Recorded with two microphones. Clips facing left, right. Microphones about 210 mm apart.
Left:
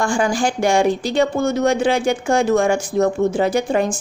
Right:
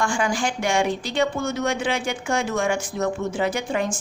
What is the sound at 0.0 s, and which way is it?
Speech, 35° left (ahead or behind).